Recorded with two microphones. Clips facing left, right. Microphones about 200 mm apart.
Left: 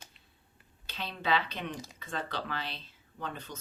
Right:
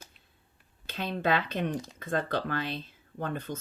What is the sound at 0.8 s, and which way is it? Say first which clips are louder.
Speech: right 7 dB; 50° right (ahead or behind).